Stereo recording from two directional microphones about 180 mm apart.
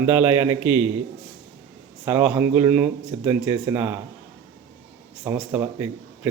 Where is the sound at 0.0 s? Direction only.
10° right (ahead or behind).